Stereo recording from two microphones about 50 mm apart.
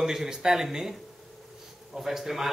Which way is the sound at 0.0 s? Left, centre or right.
Centre.